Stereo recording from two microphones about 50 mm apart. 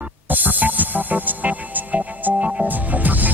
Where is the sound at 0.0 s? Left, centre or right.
Right.